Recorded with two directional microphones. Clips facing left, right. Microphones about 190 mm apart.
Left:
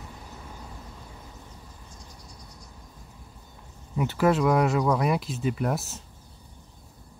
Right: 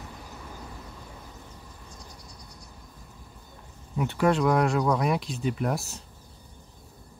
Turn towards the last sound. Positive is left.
turn(degrees=0)  # may be behind; listen again after turning